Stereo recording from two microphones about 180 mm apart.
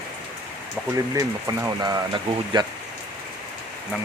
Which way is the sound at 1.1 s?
15° right (ahead or behind).